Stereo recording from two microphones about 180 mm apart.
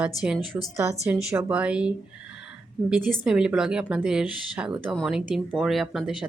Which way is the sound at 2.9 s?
5° right (ahead or behind).